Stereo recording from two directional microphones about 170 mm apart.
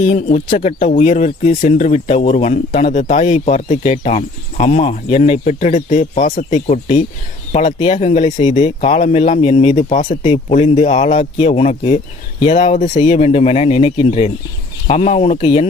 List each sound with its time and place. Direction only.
0.1 s speech: 45° left (ahead or behind)